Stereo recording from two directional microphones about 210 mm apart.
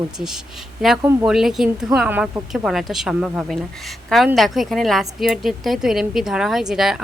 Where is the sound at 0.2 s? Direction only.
Centre (ahead or behind).